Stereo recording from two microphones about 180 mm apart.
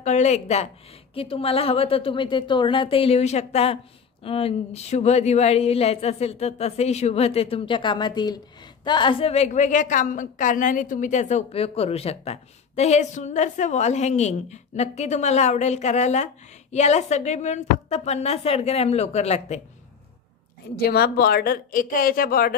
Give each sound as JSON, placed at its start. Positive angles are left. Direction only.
{"t": 0.0, "sound": "a woman's voice", "side_deg": 40}
{"t": 20.7, "sound": "speech", "side_deg": 60}